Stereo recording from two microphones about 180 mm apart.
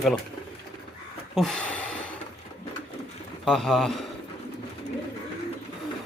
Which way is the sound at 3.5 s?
Centre (ahead or behind).